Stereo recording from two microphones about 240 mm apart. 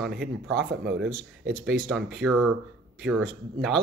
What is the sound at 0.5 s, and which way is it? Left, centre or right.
Speech, right.